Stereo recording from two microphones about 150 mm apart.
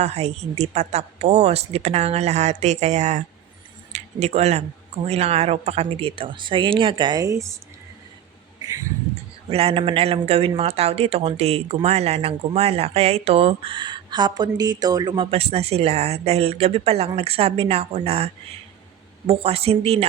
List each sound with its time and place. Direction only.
0.0 s speech: 45° right (ahead or behind); by 7.6 s 20° right (ahead or behind)
8.6 s a sound: 25° right (ahead or behind)
9.5 s speech: 40° right (ahead or behind)
19.3 s speech: 40° right (ahead or behind)